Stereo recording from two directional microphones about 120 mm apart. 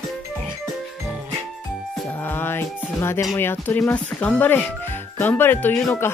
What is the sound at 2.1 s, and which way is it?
Music, 15° left (ahead or behind).